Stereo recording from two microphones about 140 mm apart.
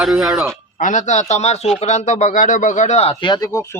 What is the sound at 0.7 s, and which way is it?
Speech, 65° left (ahead or behind).